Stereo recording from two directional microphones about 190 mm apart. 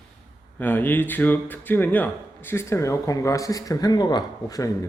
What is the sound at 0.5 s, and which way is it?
Speech, 10° left (ahead or behind).